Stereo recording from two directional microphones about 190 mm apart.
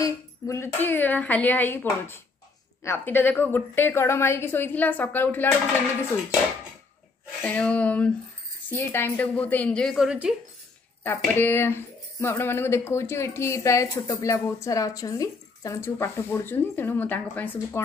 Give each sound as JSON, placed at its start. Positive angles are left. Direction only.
{"t": 0.0, "sound": "speech", "side_deg": 15}
{"t": 7.4, "sound": "speech", "side_deg": 5}
{"t": 11.1, "sound": "speech", "side_deg": 10}